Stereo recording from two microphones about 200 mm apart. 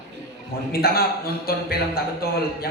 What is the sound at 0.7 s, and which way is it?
Music, 50° left (ahead or behind).